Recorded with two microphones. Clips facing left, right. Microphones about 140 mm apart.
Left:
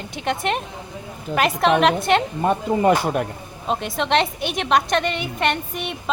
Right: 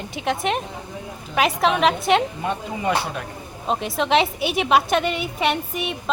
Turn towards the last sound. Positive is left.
turn(degrees=0)  # may be behind; listen again after turning